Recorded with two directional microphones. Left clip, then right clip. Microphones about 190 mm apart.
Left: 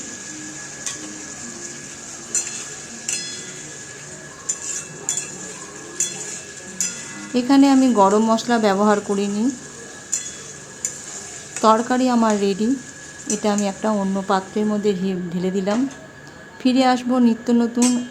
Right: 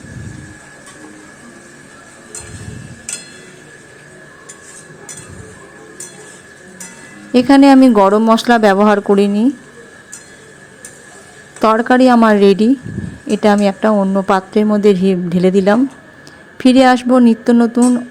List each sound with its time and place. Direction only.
7.3 s a woman's voice: 35° right (ahead or behind)
11.6 s a woman's voice: 30° right (ahead or behind)